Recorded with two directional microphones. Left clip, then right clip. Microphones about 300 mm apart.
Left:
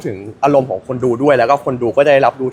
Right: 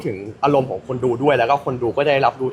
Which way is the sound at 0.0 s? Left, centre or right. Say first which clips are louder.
Left 4 dB; left.